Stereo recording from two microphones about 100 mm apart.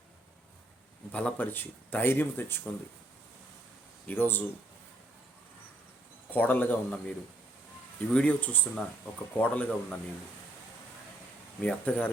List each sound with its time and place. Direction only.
1.1 s speech: 15° left (ahead or behind)
4.0 s speech: 20° left (ahead or behind)
6.3 s speech: 20° left (ahead or behind)
8.1 s speech: 10° left (ahead or behind)
11.6 s speech: 10° left (ahead or behind)